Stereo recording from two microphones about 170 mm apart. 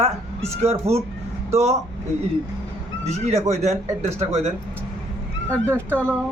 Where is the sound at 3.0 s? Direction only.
40° right (ahead or behind).